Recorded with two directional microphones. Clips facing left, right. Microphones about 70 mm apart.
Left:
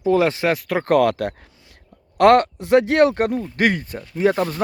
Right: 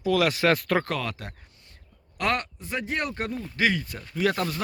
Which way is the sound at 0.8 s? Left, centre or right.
Left.